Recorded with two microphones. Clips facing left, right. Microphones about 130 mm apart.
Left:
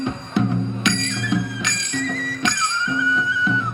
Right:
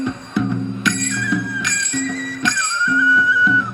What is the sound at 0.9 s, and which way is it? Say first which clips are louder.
Music: right 2 dB; 25° left (ahead or behind).